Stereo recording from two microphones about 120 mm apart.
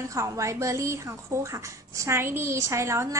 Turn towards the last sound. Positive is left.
turn(degrees=-25)  # may be behind; listen again after turning